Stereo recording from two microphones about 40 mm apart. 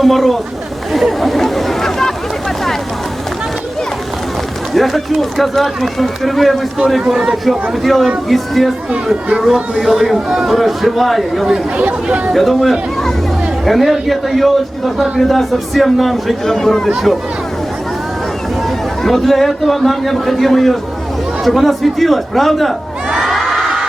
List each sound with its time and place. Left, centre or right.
0.0 s speech: centre
4.7 s speech: centre
7.1 s speech: centre
7.4 s speech: centre
9.7 s speech: centre
11.8 s speech: right
12.3 s speech: centre
19.0 s speech: centre
23.1 s crowd: centre